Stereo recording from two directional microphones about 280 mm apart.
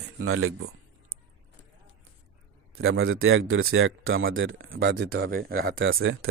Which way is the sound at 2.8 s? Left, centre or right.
Right.